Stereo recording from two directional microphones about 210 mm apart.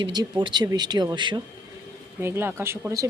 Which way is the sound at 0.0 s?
20° right (ahead or behind).